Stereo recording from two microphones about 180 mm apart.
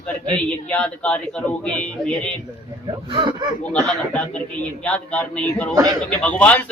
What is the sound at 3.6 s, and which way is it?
A man's voice, 10° left (ahead or behind).